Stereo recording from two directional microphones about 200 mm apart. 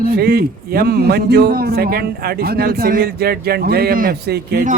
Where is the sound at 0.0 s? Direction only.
50° right (ahead or behind).